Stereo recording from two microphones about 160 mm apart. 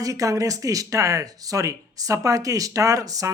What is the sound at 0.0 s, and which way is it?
Speech, 20° right (ahead or behind).